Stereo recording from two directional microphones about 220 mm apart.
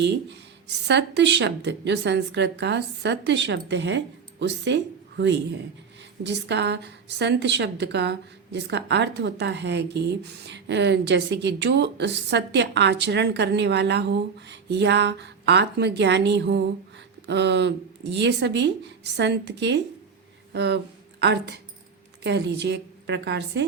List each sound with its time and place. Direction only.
0.7 s speech: 50° right (ahead or behind)